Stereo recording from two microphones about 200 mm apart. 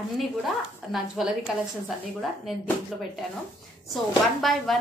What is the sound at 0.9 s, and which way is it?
A woman's voice, centre (ahead or behind).